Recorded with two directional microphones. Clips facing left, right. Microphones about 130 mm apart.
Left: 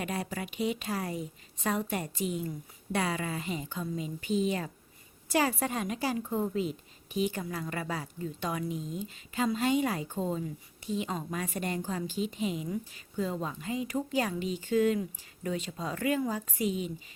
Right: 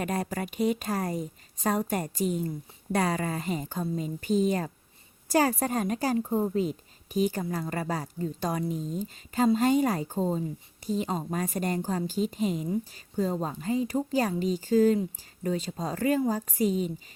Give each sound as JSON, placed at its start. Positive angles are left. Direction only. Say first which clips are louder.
{"t": 0.0, "sound": "a woman's voice", "louder": "right 4 dB", "side_deg": -45}